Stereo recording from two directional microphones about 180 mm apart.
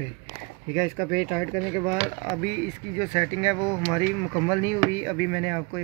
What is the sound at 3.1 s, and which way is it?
Speech, 10° right (ahead or behind).